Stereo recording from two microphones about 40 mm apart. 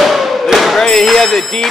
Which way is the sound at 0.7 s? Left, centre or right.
Centre.